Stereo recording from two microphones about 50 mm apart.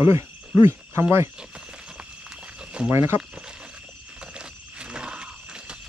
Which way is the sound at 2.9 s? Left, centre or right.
Right.